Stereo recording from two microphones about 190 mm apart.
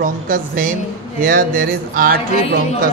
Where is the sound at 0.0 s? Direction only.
45° right (ahead or behind).